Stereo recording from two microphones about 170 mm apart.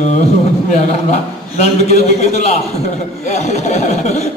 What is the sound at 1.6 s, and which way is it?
Speech, 40° left (ahead or behind).